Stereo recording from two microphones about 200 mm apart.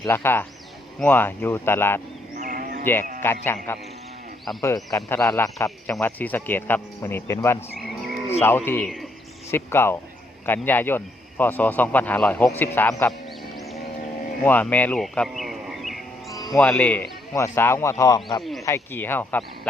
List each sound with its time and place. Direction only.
0.0 s speech: 10° left (ahead or behind)
2.4 s livestock: 45° right (ahead or behind)
2.9 s speech: 10° left (ahead or behind)
7.8 s moo: centre (ahead or behind)
8.3 s speech: 10° left (ahead or behind)
14.4 s speech: 10° left (ahead or behind)
16.3 s music: 20° left (ahead or behind)
16.6 s speech: 5° left (ahead or behind)